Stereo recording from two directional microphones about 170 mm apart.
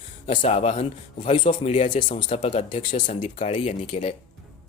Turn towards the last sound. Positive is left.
turn(degrees=40)  # may be behind; listen again after turning